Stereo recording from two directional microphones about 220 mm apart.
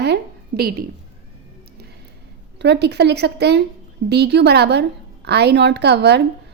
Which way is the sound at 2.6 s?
50° right (ahead or behind).